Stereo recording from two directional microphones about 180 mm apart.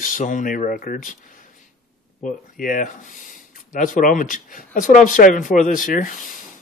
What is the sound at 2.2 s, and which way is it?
Speech, 50° left (ahead or behind).